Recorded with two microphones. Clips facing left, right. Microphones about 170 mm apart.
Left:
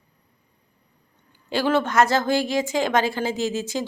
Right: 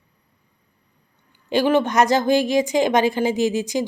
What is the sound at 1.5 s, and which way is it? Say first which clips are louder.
A woman's voice: right 4 dB; 15° right (ahead or behind).